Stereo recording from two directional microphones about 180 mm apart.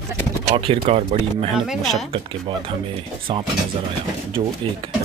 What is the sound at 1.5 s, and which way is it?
Speech, centre (ahead or behind).